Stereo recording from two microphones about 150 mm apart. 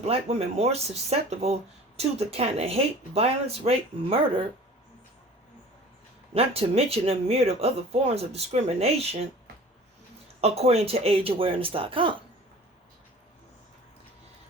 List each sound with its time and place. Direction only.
0.0 s speech: 45° right (ahead or behind)
6.3 s speech: 40° right (ahead or behind)
10.4 s speech: 45° right (ahead or behind)